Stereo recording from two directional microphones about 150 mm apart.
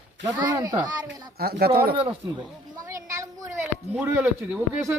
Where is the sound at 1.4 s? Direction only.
90° right.